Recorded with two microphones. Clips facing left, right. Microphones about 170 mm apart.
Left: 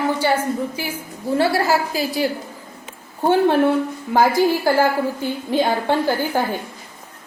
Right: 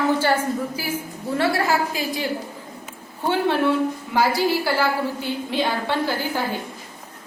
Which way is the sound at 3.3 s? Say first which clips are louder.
Left 4 dB; 45° left (ahead or behind).